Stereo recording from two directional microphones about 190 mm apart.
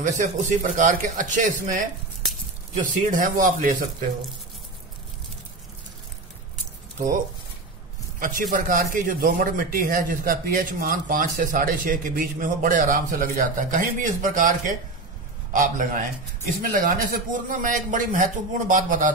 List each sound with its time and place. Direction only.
0.0 s a man's voice: 45° right (ahead or behind)
8.2 s a man's voice: 45° right (ahead or behind)